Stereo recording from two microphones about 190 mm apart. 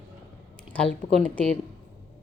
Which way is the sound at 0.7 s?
5° left (ahead or behind).